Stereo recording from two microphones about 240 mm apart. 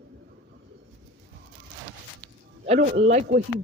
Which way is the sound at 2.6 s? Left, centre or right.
Right.